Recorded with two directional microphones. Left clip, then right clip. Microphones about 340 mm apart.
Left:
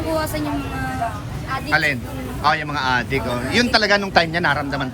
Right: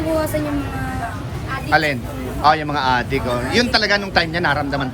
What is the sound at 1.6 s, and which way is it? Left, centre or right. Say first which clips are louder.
A man's voice: right 2 dB; centre.